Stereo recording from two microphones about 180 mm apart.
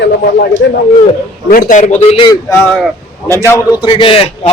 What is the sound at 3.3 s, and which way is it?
Speech, 15° left (ahead or behind).